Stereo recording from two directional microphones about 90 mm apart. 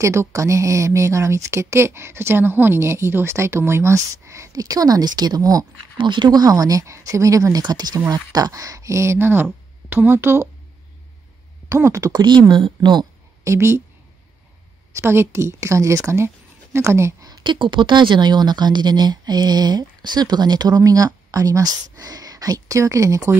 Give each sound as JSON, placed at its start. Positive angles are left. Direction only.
{"t": 0.0, "sound": "speech", "side_deg": -30}
{"t": 5.9, "sound": "speech", "side_deg": -60}
{"t": 11.7, "sound": "speech", "side_deg": -35}
{"t": 12.1, "sound": "speech", "side_deg": -55}
{"t": 13.4, "sound": "a woman's voice", "side_deg": -30}
{"t": 14.9, "sound": "speech", "side_deg": -30}
{"t": 17.3, "sound": "speech", "side_deg": -60}